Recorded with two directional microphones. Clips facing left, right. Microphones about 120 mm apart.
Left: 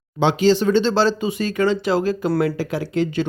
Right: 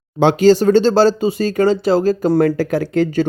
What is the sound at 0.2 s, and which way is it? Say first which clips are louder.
Speech: right 5 dB; 45° right (ahead or behind).